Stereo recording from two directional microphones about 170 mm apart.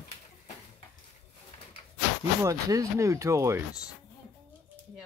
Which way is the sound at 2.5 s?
20° right (ahead or behind).